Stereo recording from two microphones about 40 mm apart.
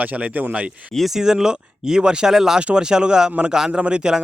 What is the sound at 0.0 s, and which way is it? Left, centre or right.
Speech, right.